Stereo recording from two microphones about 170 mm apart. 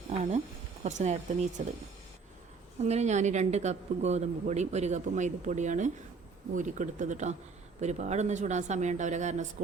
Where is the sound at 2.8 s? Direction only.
40° right (ahead or behind).